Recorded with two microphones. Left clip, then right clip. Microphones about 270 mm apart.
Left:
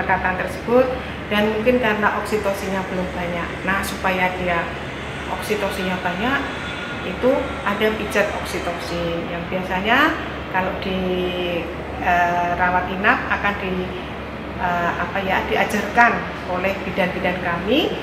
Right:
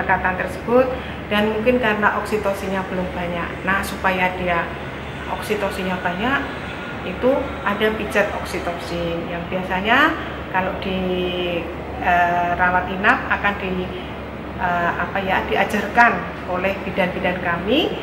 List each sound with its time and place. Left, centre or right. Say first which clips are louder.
0.0 s a woman's voice: right 1 dB; centre
3.3 s speech: right 2 dB; centre
7.6 s speech: even; centre
9.7 s speech: right 1 dB; centre
15.1 s speech: even; centre